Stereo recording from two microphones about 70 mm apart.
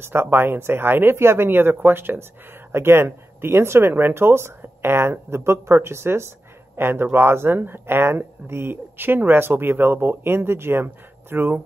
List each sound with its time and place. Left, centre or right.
0.0 s speech: right